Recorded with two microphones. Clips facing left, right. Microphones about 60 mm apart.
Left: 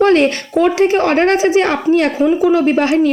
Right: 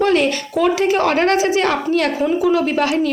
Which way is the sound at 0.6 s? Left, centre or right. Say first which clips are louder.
Left 3 dB; left.